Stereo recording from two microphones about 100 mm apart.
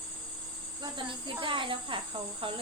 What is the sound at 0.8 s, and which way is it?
Speech, 55° right (ahead or behind).